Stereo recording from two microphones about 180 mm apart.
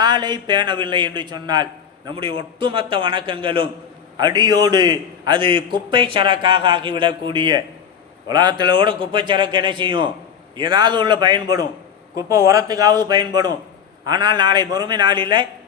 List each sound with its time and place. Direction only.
0.0 s a man's voice: 25° right (ahead or behind)